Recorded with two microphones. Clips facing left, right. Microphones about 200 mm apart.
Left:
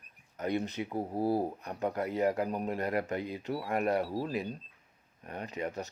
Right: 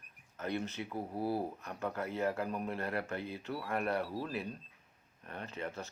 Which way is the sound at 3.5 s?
30° left (ahead or behind).